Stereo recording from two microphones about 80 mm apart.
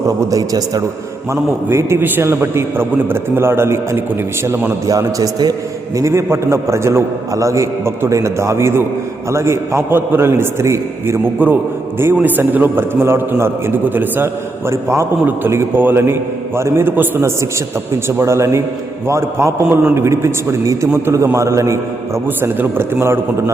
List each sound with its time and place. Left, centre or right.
0.1 s a man's voice: right
1.3 s a man's voice: right
4.9 s a man's voice: right
6.0 s a man's voice: right